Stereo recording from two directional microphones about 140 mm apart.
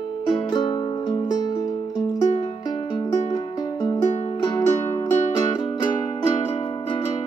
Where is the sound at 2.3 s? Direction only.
45° left (ahead or behind).